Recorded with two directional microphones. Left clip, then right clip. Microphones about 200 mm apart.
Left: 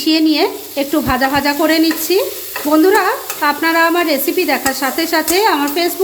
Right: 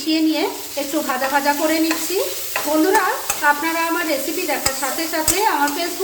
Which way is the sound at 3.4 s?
50° left (ahead or behind).